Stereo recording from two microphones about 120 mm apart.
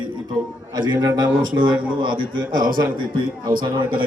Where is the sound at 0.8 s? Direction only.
35° right (ahead or behind).